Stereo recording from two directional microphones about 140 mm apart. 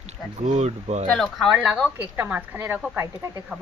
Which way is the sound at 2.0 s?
15° right (ahead or behind).